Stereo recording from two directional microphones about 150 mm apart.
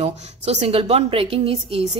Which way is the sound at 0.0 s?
45° right (ahead or behind).